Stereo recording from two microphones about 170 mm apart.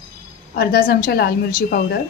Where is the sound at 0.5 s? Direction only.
60° left (ahead or behind).